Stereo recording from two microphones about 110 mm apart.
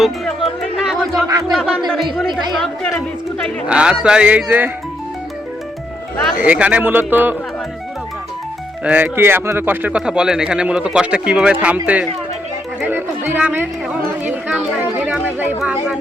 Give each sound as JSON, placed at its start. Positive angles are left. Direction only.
{"t": 0.8, "sound": "a sound", "side_deg": 0}
{"t": 1.5, "sound": "a woman's voice", "side_deg": 5}
{"t": 3.7, "sound": "speech", "side_deg": -10}
{"t": 6.4, "sound": "speech", "side_deg": -10}
{"t": 8.8, "sound": "speech", "side_deg": -10}